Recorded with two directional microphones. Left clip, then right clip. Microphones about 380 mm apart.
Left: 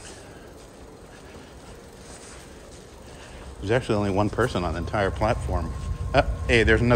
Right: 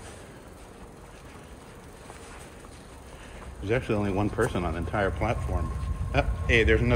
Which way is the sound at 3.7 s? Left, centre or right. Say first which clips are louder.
Left 4 dB; centre.